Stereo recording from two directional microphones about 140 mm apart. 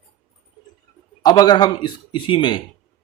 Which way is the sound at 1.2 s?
30° left (ahead or behind).